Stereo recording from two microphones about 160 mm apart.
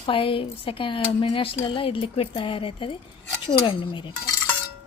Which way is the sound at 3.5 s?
30° left (ahead or behind).